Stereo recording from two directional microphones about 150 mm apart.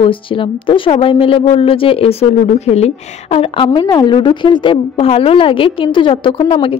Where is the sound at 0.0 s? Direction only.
35° left (ahead or behind).